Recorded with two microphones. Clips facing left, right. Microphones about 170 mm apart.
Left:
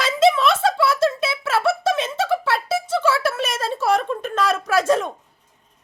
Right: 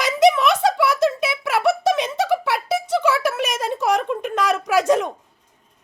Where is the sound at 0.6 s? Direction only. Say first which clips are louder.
Right 1 dB; 15° right (ahead or behind).